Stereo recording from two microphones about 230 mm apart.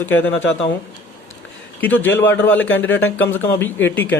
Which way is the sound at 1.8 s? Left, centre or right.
Centre.